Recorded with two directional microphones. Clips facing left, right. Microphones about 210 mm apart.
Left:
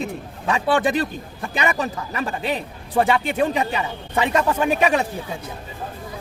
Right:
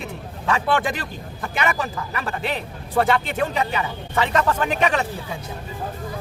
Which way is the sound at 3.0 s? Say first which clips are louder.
Left 1 dB; 10° left (ahead or behind).